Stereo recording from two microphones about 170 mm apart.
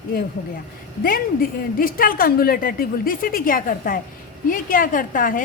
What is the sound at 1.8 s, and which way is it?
A woman's voice, 55° left (ahead or behind).